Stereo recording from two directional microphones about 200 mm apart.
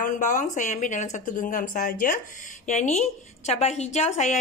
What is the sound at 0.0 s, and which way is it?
A woman's voice, 40° left (ahead or behind).